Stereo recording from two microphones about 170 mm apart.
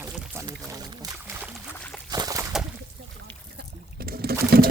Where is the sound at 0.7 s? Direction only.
20° right (ahead or behind).